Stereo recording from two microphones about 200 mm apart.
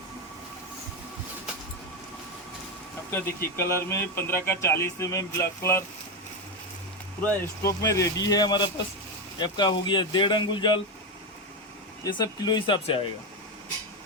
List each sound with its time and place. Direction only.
3.1 s speech: 10° left (ahead or behind)
7.2 s speech: 10° left (ahead or behind)
12.0 s speech: 20° left (ahead or behind)